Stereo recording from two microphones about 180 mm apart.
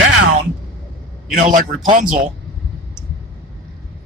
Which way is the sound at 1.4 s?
50° right (ahead or behind).